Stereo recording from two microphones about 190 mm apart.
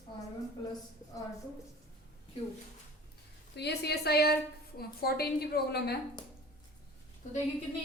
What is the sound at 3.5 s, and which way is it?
A woman's voice, 60° left (ahead or behind).